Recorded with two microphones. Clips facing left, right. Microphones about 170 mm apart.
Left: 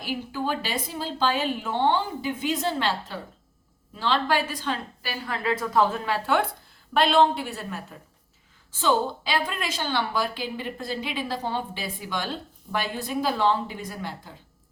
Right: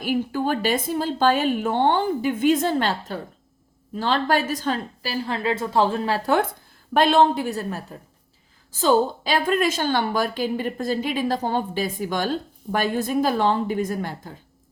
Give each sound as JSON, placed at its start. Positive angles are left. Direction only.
{"t": 0.0, "sound": "a woman's voice", "side_deg": -50}
{"t": 3.9, "sound": "a woman's voice", "side_deg": -45}
{"t": 5.2, "sound": "a woman's voice", "side_deg": -25}